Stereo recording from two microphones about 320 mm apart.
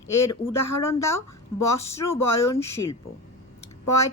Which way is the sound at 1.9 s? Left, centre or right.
Centre.